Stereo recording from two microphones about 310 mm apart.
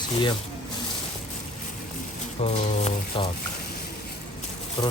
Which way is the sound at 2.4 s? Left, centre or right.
Left.